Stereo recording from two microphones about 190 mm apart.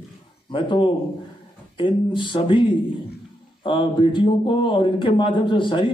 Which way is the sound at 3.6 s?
25° left (ahead or behind).